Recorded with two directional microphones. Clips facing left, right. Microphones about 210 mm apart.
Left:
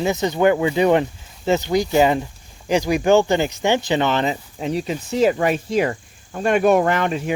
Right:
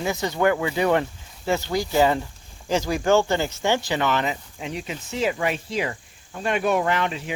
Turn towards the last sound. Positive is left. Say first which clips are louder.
# left 5 dB
turn(degrees=50)  # may be behind; listen again after turning